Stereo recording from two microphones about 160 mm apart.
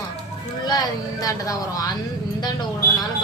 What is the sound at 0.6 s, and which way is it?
A woman's voice, 25° left (ahead or behind).